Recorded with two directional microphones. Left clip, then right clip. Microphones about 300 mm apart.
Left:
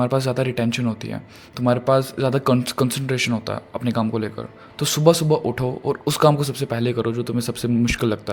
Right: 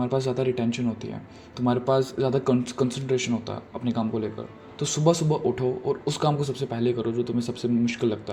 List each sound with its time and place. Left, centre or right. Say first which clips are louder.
0.0 s speech: left 4 dB; left